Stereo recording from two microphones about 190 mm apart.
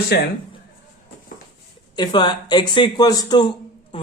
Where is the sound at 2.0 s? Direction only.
25° left (ahead or behind).